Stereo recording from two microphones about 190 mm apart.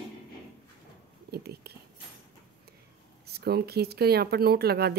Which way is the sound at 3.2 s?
55° right (ahead or behind).